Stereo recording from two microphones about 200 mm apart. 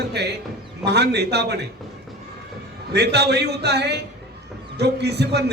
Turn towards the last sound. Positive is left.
turn(degrees=-55)  # may be behind; listen again after turning